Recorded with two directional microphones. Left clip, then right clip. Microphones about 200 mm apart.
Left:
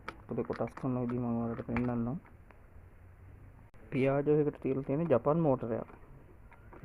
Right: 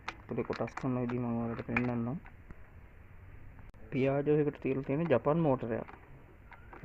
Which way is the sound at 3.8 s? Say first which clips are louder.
Left 1 dB; 5° left (ahead or behind).